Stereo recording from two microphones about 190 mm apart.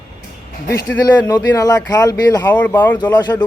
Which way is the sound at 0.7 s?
15° left (ahead or behind).